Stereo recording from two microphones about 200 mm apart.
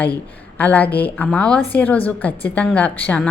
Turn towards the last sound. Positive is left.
turn(degrees=5)  # may be behind; listen again after turning